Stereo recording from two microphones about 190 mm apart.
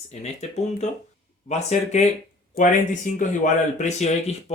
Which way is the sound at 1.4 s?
40° left (ahead or behind).